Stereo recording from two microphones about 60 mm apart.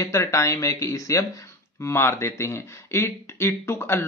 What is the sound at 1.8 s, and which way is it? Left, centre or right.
Speech, left.